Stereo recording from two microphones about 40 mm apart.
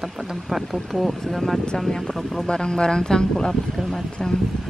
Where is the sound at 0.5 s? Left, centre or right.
Centre.